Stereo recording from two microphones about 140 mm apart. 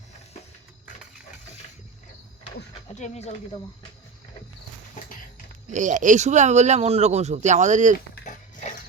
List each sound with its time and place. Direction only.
2.9 s speech: 55° left (ahead or behind)
5.7 s speech: 65° right (ahead or behind)
8.2 s a sound: 75° left (ahead or behind)